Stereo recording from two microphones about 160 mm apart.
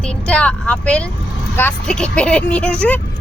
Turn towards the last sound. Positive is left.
turn(degrees=10)  # may be behind; listen again after turning